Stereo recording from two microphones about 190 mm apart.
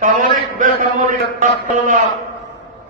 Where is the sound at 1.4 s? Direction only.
45° right (ahead or behind).